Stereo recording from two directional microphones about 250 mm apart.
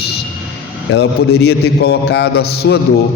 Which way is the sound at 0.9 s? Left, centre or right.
Left.